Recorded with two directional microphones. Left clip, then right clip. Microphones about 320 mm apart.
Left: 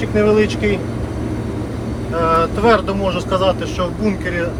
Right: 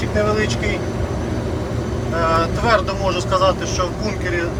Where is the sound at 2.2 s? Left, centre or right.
Left.